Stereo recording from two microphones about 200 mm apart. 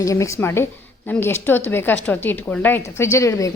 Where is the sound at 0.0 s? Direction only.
15° left (ahead or behind).